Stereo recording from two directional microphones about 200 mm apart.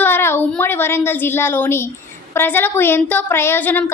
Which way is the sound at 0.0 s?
10° left (ahead or behind).